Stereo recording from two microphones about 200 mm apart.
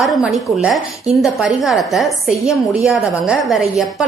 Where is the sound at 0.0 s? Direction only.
Centre (ahead or behind).